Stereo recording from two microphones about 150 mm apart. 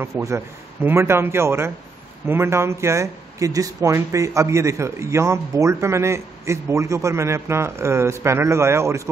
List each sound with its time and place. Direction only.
0.0 s speech: 20° right (ahead or behind)